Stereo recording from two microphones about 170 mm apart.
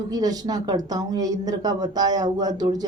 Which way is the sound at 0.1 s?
20° right (ahead or behind).